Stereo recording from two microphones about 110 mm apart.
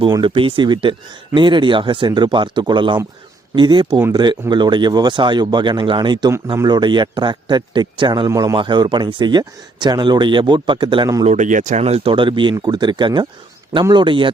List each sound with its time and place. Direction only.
0.0 s speech: 50° right (ahead or behind)
8.3 s a man's voice: 30° right (ahead or behind)
8.5 s speech: 45° right (ahead or behind)
11.3 s speech: 80° right; by 14.3 s 50° right (ahead or behind)